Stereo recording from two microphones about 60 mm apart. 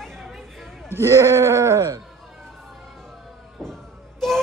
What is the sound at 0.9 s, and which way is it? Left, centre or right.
Speech, right.